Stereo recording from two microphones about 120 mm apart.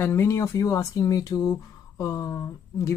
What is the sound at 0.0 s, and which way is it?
Speech, 20° left (ahead or behind).